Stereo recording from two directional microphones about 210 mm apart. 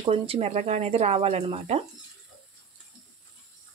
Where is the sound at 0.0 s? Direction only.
30° right (ahead or behind).